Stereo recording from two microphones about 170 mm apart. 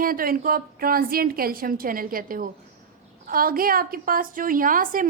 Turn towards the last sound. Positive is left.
turn(degrees=-55)  # may be behind; listen again after turning